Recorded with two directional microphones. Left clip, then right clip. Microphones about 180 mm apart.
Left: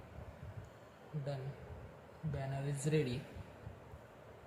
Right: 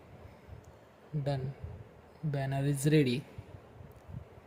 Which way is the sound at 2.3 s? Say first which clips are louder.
Right 8 dB; 50° right (ahead or behind).